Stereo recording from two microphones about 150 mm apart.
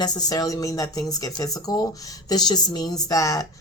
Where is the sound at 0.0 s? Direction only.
25° left (ahead or behind).